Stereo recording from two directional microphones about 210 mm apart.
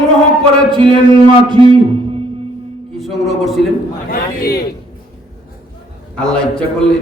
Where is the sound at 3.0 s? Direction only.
Centre (ahead or behind).